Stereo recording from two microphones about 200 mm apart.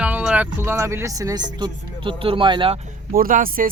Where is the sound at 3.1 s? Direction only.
45° right (ahead or behind).